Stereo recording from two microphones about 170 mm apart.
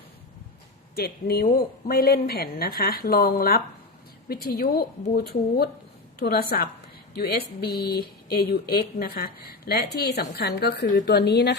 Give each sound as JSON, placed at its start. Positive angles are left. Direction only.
{"t": 0.9, "sound": "speech", "side_deg": 65}